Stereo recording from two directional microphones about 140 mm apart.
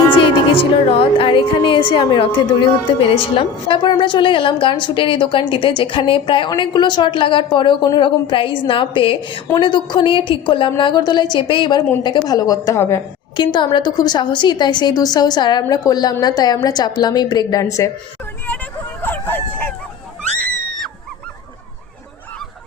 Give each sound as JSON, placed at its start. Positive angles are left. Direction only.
{"t": 0.2, "sound": "a woman's voice", "side_deg": 40}
{"t": 13.3, "sound": "a woman's voice", "side_deg": 35}
{"t": 19.0, "sound": "a sound", "side_deg": 15}